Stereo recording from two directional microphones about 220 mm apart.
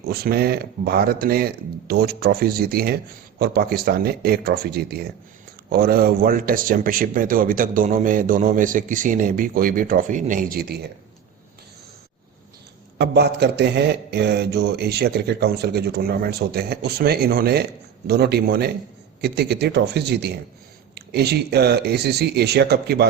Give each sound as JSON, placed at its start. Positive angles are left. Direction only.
{"t": 0.1, "sound": "speech", "side_deg": -45}
{"t": 13.0, "sound": "speech", "side_deg": -50}